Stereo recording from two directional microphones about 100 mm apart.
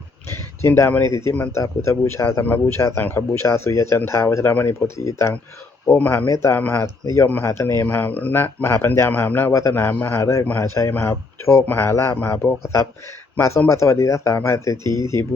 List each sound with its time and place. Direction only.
0.6 s speech: 20° left (ahead or behind)
6.2 s speech: 30° left (ahead or behind)
9.5 s speech: 30° left (ahead or behind)
13.7 s speech: 30° left (ahead or behind)